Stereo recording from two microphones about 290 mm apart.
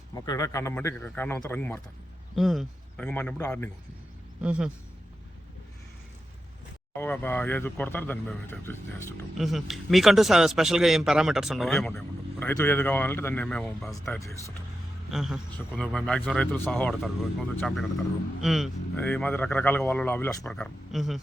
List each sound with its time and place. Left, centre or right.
0.1 s speech: centre
4.4 s a man's voice: centre
7.0 s speech: centre